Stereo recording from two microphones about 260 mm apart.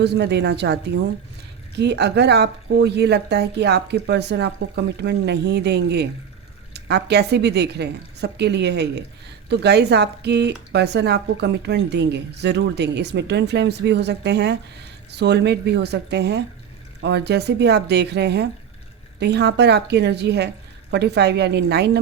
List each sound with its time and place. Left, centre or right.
0.0 s speech: right